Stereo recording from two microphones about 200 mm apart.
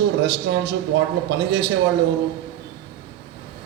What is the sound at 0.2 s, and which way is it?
A man's voice, 60° right (ahead or behind).